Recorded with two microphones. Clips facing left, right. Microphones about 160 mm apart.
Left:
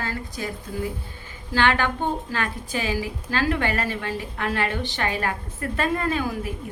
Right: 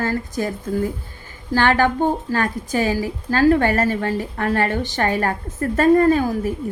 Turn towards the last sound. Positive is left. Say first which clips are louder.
# right 9 dB
turn(degrees=-40)  # may be behind; listen again after turning